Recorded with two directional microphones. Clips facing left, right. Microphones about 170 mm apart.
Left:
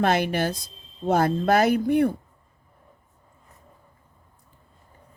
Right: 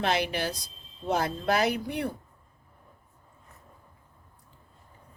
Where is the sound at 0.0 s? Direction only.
50° left (ahead or behind).